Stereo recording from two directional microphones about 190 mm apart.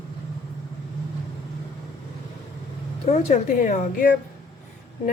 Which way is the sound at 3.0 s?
40° left (ahead or behind).